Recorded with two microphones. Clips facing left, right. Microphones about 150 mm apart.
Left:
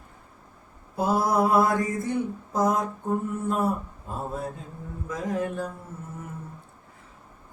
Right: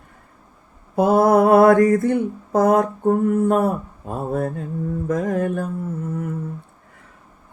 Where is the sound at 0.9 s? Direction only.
60° right (ahead or behind).